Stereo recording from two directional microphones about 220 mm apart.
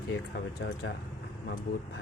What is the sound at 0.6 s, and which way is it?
Speech, 50° left (ahead or behind).